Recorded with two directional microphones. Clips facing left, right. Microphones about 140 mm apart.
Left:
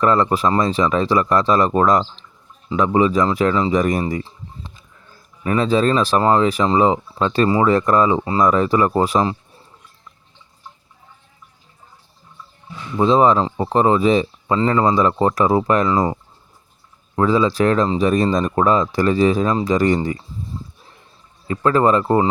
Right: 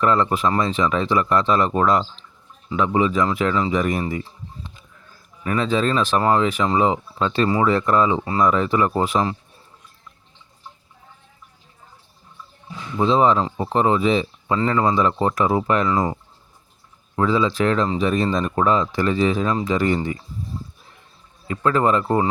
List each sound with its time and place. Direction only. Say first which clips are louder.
0.0 s speech: left 2 dB; 40° left (ahead or behind)
4.1 s a sound: left 3 dB; 35° left (ahead or behind)
5.4 s speech: left 4 dB; 35° left (ahead or behind)
13.0 s speech: left 3 dB; 40° left (ahead or behind)
17.2 s speech: left 3 dB; 40° left (ahead or behind)
21.4 s speech: left 3 dB; 35° left (ahead or behind)